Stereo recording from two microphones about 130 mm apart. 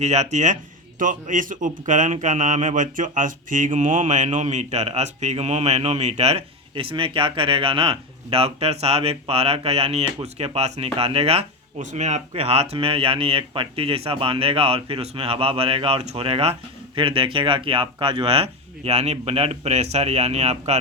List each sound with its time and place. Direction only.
0.0 s speech: 60° right (ahead or behind)
11.8 s speech: 70° right (ahead or behind)